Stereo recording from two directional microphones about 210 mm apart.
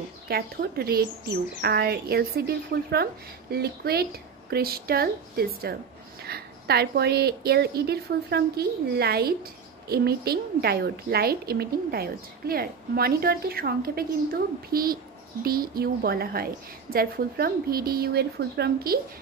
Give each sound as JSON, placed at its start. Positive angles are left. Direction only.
{"t": 0.3, "sound": "speech", "side_deg": -50}